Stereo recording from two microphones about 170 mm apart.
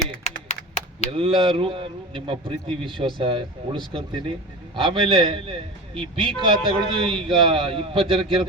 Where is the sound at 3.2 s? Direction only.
30° right (ahead or behind).